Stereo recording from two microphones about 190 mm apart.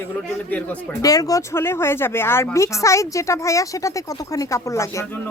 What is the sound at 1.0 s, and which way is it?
Speech, 20° left (ahead or behind).